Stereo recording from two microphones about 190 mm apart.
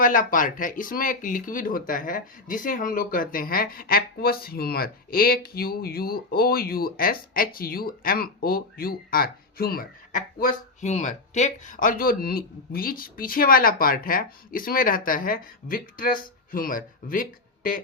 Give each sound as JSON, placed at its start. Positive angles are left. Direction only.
{"t": 0.0, "sound": "speech", "side_deg": 45}